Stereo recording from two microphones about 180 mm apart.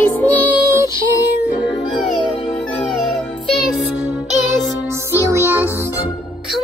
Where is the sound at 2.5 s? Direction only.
5° left (ahead or behind).